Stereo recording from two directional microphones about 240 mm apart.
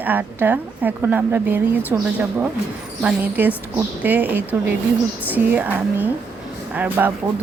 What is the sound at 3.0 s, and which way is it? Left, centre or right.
A woman's voice, centre.